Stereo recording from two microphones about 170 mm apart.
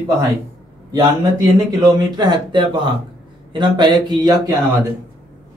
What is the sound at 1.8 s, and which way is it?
Speech, 25° right (ahead or behind).